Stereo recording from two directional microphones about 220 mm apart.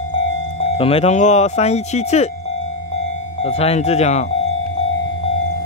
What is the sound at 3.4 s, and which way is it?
Speech, 30° left (ahead or behind).